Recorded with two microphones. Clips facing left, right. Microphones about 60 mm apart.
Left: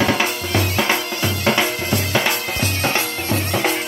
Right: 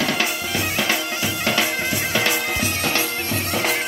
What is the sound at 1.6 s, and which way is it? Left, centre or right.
Music, centre.